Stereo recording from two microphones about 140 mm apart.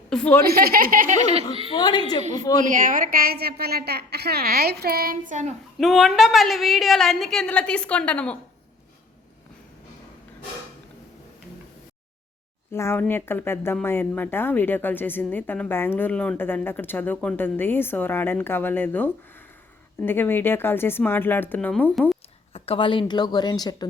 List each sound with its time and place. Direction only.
0.1 s a woman's voice: 10° left (ahead or behind)
0.4 s speech: 90° right; by 1.5 s 55° right (ahead or behind)
1.7 s a woman's voice: 35° left (ahead or behind)
2.6 s a woman's voice: 70° right (ahead or behind)
5.8 s a woman's voice: centre (ahead or behind)
12.7 s a woman's voice: 15° left (ahead or behind)
22.5 s a woman's voice: 45° left (ahead or behind); by 23.9 s 30° left (ahead or behind)